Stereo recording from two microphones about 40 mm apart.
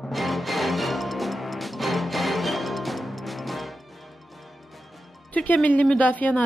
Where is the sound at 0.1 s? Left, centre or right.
Centre.